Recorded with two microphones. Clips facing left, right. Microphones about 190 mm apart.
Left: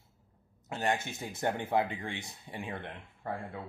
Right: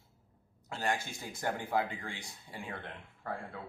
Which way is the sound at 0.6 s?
20° left (ahead or behind).